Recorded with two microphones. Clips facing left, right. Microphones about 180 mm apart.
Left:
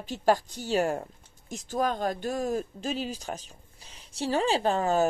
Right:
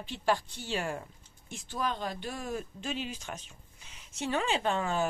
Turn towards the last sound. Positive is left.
turn(degrees=40)  # may be behind; listen again after turning